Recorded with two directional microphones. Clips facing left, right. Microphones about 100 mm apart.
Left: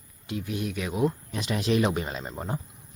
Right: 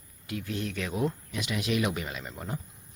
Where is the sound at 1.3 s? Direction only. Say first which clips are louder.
Left 4 dB; 35° left (ahead or behind).